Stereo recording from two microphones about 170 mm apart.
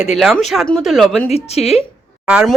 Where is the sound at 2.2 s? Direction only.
5° right (ahead or behind).